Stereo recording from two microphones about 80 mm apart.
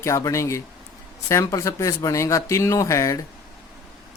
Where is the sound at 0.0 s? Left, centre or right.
Left.